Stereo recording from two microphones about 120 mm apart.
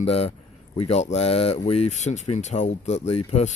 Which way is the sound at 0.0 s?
55° left (ahead or behind).